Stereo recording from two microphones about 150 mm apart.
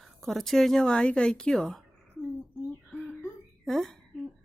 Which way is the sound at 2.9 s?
Centre (ahead or behind).